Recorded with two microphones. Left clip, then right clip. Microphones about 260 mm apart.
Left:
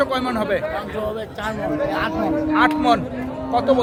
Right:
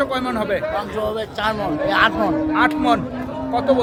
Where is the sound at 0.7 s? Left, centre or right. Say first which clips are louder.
Right 3 dB; centre.